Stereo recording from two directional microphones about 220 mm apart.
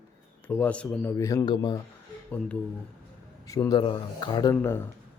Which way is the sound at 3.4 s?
15° left (ahead or behind).